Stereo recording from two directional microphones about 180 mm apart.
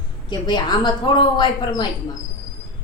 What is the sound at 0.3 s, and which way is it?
A woman's voice, 25° left (ahead or behind).